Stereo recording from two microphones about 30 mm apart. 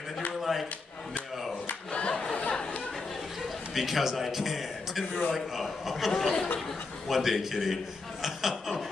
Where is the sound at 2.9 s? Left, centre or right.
Centre.